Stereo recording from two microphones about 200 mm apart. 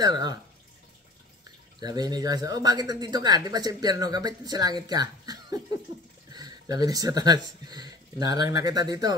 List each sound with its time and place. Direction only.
0.0 s speech: 20° right (ahead or behind)
1.8 s speech: 20° right (ahead or behind)